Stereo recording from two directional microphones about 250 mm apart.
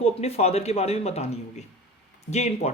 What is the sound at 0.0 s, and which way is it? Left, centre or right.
Speech, left.